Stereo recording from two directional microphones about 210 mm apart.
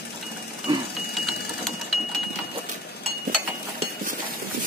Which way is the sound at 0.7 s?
20° right (ahead or behind).